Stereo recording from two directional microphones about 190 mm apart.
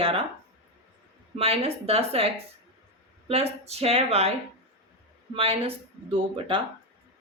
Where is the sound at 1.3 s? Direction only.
30° right (ahead or behind).